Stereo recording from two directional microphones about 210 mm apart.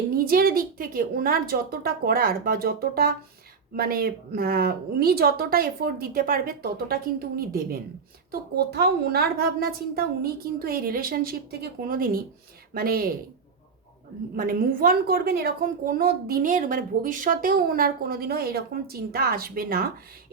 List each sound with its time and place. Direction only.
0.1 s a woman's voice: 45° right (ahead or behind)
14.3 s a woman's voice: 40° right (ahead or behind)